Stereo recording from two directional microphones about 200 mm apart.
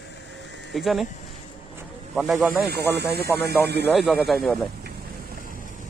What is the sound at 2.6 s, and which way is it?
Speech, 55° right (ahead or behind).